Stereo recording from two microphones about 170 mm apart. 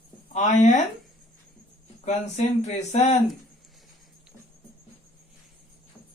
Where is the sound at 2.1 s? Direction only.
40° left (ahead or behind).